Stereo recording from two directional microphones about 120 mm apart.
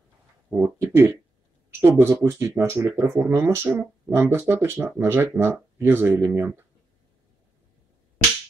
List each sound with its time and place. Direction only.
0.5 s speech: 20° right (ahead or behind)